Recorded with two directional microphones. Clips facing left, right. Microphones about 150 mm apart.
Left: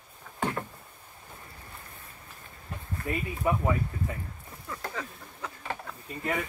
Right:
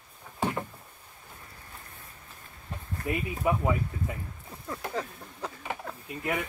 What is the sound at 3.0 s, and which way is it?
Speech, 10° right (ahead or behind).